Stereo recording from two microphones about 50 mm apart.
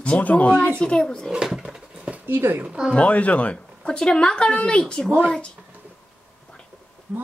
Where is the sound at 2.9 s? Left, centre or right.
Left.